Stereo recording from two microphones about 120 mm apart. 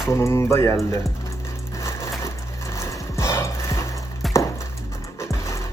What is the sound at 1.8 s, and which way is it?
Crushing, 25° left (ahead or behind).